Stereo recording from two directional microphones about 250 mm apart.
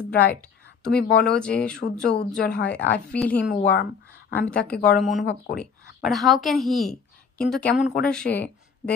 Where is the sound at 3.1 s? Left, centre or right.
Centre.